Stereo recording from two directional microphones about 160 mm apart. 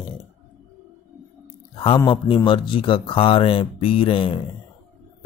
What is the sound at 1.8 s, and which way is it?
Speech, 30° left (ahead or behind).